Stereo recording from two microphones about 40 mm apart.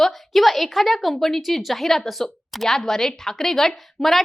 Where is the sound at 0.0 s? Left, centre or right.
Centre.